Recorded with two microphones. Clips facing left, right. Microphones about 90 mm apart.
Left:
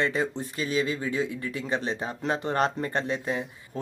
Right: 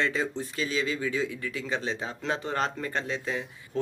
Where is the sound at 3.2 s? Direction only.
20° left (ahead or behind).